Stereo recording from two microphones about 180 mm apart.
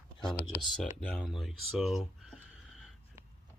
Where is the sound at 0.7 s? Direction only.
5° left (ahead or behind).